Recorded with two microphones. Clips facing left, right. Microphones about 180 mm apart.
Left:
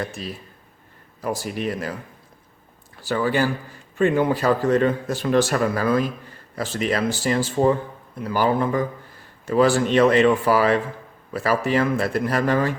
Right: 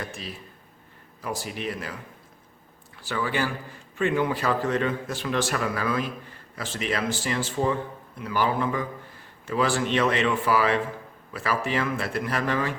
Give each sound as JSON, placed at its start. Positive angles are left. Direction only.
{"t": 1.2, "sound": "a man's voice", "side_deg": 40}